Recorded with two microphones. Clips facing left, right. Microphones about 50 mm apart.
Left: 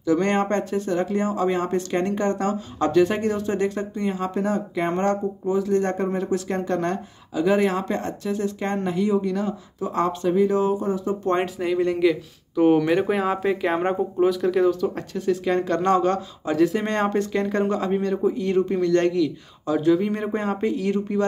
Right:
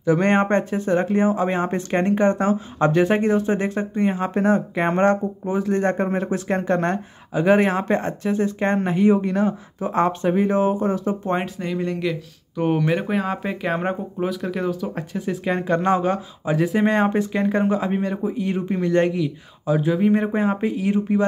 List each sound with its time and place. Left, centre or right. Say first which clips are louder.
0.0 s speech: right 3 dB; right
11.2 s speech: left 2 dB; centre